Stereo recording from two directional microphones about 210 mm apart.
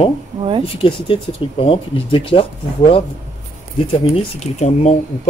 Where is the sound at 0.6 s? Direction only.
25° left (ahead or behind).